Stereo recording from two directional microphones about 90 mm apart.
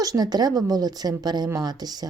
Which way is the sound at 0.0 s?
45° right (ahead or behind).